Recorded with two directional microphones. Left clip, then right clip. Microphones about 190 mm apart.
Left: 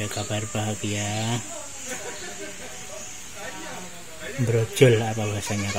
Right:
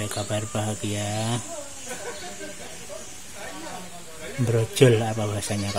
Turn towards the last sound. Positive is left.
turn(degrees=-10)  # may be behind; listen again after turning